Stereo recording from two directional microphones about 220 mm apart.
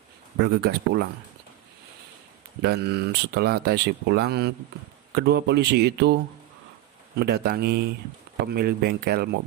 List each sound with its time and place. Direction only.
0.6 s speech: 45° right (ahead or behind)
2.6 s speech: 45° right (ahead or behind)
7.2 s speech: 45° right (ahead or behind)